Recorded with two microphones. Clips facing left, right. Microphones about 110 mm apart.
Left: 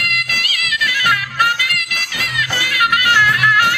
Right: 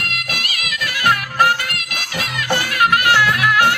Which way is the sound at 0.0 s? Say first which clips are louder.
Left 2 dB; 35° right (ahead or behind).